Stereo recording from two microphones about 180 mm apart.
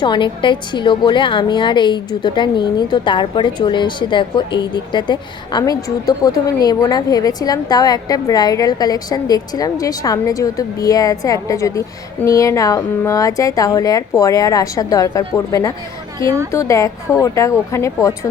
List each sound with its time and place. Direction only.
0.0 s a woman's voice: 25° left (ahead or behind)